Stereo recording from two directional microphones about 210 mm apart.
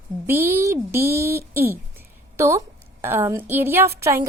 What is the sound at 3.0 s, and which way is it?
Speech, 10° right (ahead or behind).